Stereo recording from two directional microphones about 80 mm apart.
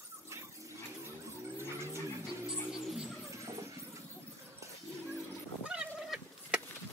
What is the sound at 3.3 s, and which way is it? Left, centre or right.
Vehicle, right.